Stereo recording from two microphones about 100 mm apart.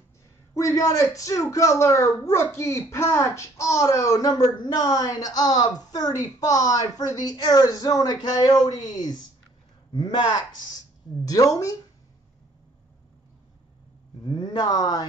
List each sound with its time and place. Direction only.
0.6 s speech: 30° left (ahead or behind)
14.2 s speech: 50° left (ahead or behind)